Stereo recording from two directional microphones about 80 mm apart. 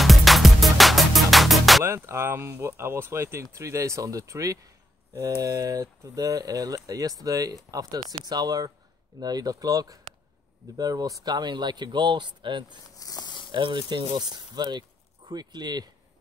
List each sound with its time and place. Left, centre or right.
0.0 s music: centre
1.9 s speech: right
13.0 s a sound: left
13.5 s speech: right